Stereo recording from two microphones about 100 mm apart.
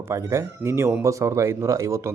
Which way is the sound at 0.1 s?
30° right (ahead or behind).